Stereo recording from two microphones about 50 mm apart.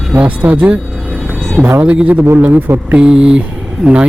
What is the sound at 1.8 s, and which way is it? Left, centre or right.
Speech, right.